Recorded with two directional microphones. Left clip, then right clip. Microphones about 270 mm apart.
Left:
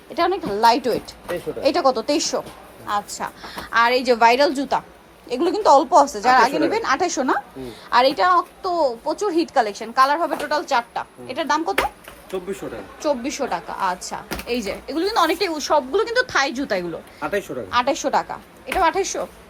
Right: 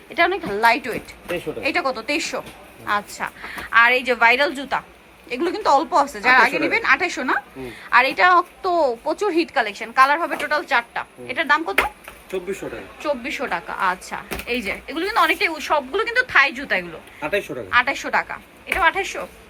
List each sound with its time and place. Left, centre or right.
0.1 s a woman's voice: centre
13.0 s a woman's voice: centre
17.2 s a woman's voice: centre
17.7 s a woman's voice: centre